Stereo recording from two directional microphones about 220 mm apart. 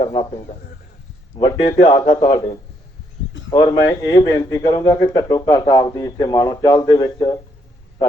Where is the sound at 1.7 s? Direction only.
20° left (ahead or behind).